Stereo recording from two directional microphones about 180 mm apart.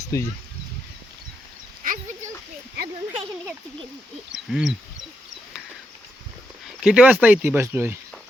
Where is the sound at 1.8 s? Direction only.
50° right (ahead or behind).